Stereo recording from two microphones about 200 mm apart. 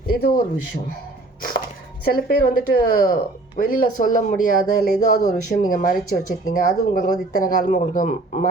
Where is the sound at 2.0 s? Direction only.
50° left (ahead or behind).